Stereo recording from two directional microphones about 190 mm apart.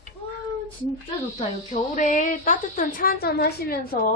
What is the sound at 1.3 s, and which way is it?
Speech, 35° left (ahead or behind).